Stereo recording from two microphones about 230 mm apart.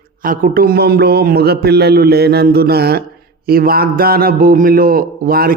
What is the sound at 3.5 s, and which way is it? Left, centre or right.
A man's voice, right.